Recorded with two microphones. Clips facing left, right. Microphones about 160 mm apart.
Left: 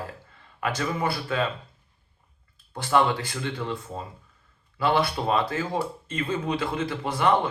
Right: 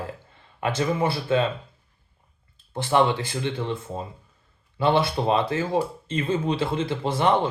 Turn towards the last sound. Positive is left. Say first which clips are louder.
# right 1 dB
turn(degrees=-25)  # may be behind; listen again after turning